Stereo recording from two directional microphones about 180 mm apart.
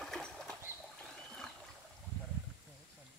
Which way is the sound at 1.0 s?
5° left (ahead or behind).